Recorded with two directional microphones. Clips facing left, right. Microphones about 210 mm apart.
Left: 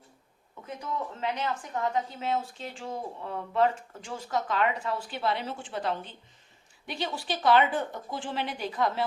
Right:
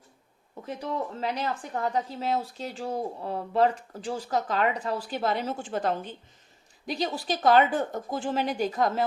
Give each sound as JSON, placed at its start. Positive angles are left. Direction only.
{"t": 0.6, "sound": "a woman's voice", "side_deg": -35}